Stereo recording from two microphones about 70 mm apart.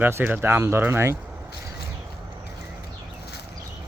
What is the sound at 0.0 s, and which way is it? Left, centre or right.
Speech, right.